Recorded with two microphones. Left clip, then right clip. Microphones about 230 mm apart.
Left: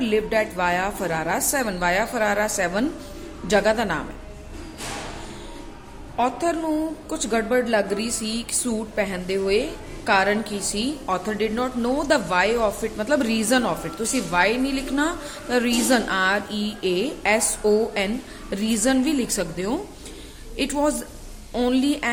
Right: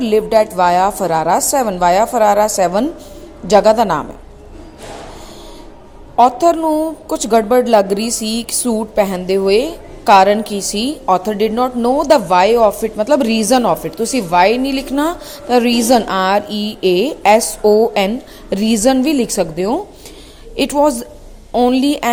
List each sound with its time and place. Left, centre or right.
0.0 s a woman's voice: right
6.1 s a woman's voice: right